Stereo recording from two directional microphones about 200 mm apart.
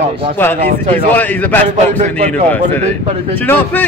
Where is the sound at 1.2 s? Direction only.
10° left (ahead or behind).